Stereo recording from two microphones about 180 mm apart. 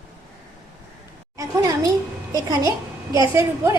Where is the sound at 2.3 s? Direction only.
20° right (ahead or behind).